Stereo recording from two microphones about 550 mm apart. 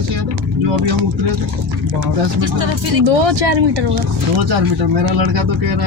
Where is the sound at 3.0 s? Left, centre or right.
Right.